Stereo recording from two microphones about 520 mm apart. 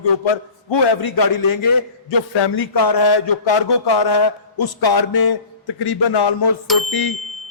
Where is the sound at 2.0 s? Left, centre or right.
Left.